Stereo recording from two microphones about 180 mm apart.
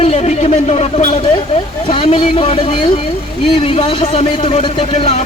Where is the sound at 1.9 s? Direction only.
30° left (ahead or behind).